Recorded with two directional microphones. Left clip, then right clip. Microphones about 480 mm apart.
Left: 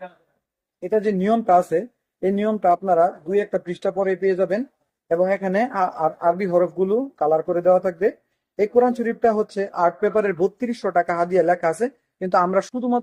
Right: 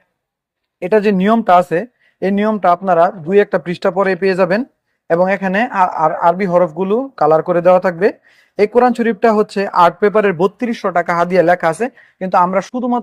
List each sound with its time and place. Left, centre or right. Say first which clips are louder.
0.8 s speech: right 8 dB; right